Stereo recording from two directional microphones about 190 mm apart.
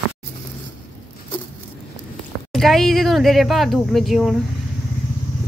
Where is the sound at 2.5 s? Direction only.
Centre (ahead or behind).